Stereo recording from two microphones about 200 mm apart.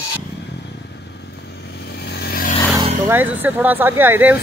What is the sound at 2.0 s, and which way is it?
Vehicle, 50° left (ahead or behind).